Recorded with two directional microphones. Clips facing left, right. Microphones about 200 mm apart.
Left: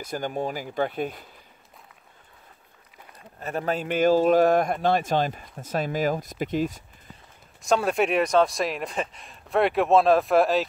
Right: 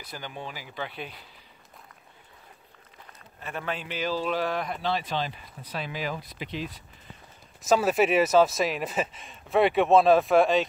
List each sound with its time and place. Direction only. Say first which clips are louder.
0.0 s speech: left 10 dB; 45° left (ahead or behind)
3.3 s speech: left 6 dB; 40° left (ahead or behind)
7.6 s speech: even; 5° right (ahead or behind)